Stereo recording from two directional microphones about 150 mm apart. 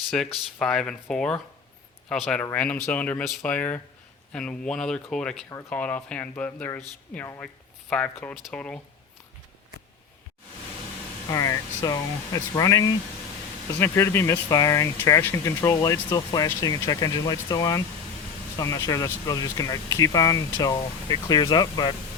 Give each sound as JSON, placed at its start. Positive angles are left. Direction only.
{"t": 0.1, "sound": "speech", "side_deg": 5}
{"t": 5.5, "sound": "speech", "side_deg": 20}
{"t": 11.3, "sound": "speech", "side_deg": 20}